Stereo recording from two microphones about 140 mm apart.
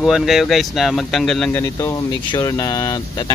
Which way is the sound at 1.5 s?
20° left (ahead or behind).